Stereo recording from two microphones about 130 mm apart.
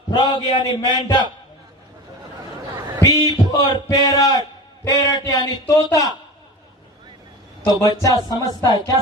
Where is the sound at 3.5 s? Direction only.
30° left (ahead or behind).